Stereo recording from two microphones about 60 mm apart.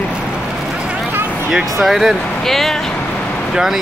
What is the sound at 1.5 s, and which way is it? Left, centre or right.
Speech, centre.